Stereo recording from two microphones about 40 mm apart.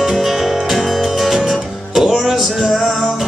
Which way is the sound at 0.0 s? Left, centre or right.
Centre.